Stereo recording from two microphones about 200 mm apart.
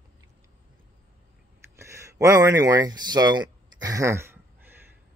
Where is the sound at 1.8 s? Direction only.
15° right (ahead or behind).